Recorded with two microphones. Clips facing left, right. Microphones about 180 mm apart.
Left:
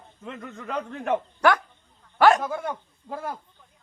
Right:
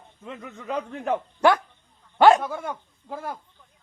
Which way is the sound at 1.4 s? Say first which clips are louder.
Right 4 dB; 25° right (ahead or behind).